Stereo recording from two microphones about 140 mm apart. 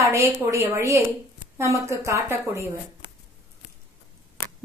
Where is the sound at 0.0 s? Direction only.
20° right (ahead or behind).